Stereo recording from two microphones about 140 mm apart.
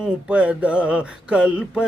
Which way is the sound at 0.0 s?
5° right (ahead or behind).